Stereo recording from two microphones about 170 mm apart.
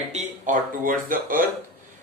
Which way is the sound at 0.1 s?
45° right (ahead or behind).